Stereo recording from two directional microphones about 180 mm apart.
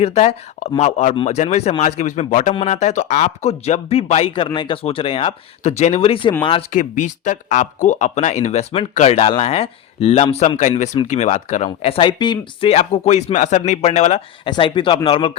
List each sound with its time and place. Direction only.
0.0 s speech: 35° left (ahead or behind)
1.1 s speech: 30° left (ahead or behind)
6.7 s speech: 45° left (ahead or behind)